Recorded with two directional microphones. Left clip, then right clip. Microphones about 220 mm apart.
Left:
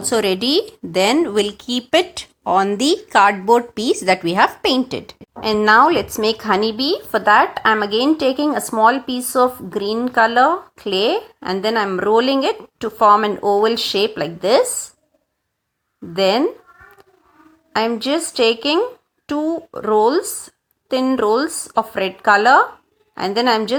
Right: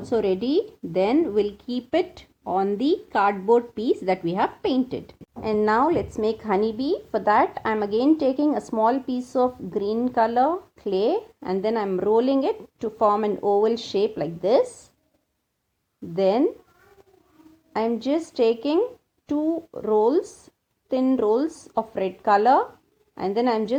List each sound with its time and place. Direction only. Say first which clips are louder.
0.0 s a woman's voice: left 5 dB; 20° left (ahead or behind)
16.1 s speech: left 5 dB; 15° left (ahead or behind)
17.7 s speech: left 6 dB; 10° left (ahead or behind)
19.4 s speech: left 4 dB; 35° left (ahead or behind)
21.9 s speech: left 5 dB; 15° left (ahead or behind)